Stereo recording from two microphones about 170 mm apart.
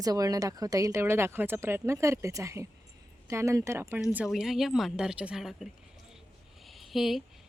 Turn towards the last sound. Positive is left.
turn(degrees=0)  # may be behind; listen again after turning